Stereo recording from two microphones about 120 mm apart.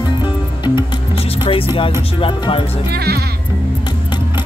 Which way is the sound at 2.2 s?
45° left (ahead or behind).